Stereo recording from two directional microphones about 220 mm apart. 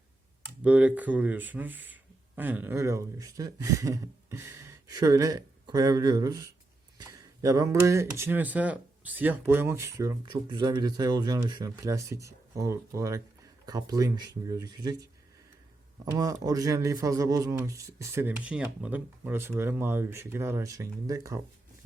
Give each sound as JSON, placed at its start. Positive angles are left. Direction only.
{"t": 0.6, "sound": "speech", "side_deg": -5}
{"t": 16.0, "sound": "speech", "side_deg": -15}